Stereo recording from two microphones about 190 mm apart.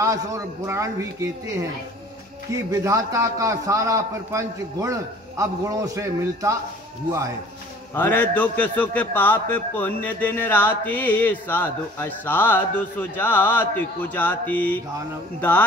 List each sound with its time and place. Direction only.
0.0 s a man's voice: 15° right (ahead or behind)
2.7 s a man's voice: 15° right (ahead or behind)
7.9 s a man's voice: 10° left (ahead or behind)